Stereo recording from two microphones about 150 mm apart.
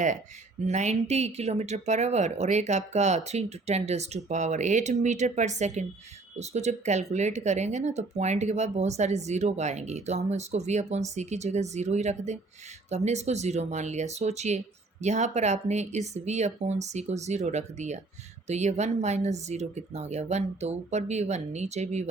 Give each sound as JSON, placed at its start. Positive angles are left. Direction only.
{"t": 0.6, "sound": "speech", "side_deg": -50}